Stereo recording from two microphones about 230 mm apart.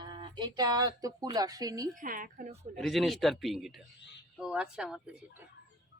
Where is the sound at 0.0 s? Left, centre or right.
Centre.